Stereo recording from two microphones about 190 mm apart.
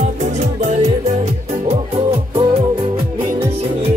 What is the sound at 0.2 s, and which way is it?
Music, 40° right (ahead or behind).